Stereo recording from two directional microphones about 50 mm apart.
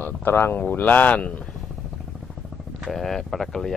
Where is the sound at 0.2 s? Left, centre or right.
Left.